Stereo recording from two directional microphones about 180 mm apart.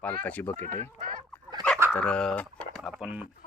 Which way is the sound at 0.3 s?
10° left (ahead or behind).